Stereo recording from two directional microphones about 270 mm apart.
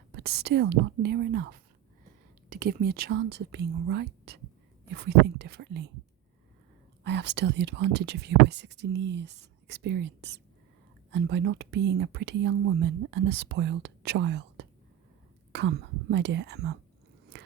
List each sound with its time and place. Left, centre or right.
0.1 s speech: right
7.0 s speech: right